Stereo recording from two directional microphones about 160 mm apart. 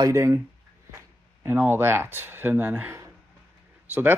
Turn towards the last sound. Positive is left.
turn(degrees=-10)  # may be behind; listen again after turning